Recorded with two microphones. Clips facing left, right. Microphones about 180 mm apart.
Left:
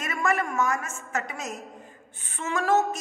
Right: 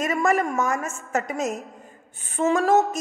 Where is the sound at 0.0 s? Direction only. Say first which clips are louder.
Right 5 dB; 40° right (ahead or behind).